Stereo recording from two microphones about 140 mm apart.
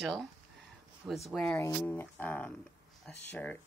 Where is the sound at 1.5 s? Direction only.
15° left (ahead or behind).